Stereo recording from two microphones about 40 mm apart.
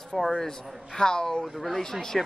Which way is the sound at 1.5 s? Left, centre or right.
Centre.